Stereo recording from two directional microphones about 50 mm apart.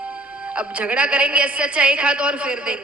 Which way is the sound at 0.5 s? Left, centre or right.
Right.